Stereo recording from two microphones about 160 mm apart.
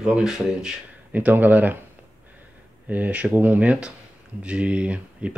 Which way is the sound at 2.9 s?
10° right (ahead or behind).